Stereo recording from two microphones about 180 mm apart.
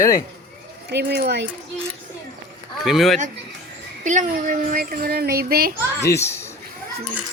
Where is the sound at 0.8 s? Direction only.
70° right (ahead or behind).